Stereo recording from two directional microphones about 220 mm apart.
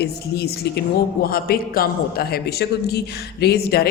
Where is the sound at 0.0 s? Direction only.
45° left (ahead or behind).